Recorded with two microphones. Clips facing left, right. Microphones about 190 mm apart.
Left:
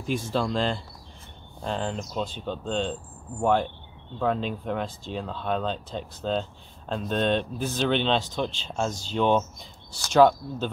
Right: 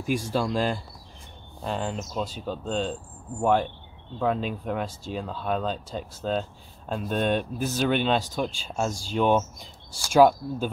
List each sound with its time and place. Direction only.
0.0 s speech: 10° right (ahead or behind)